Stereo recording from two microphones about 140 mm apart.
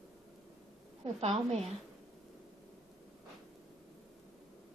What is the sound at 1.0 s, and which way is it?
Speech, 45° right (ahead or behind).